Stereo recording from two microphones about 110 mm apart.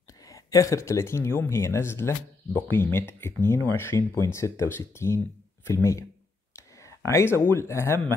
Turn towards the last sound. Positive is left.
turn(degrees=25)  # may be behind; listen again after turning